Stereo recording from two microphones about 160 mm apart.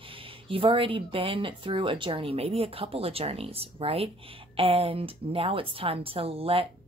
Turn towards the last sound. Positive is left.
turn(degrees=-35)  # may be behind; listen again after turning